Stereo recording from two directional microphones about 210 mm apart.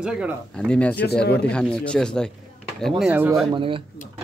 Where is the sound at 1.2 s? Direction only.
50° left (ahead or behind).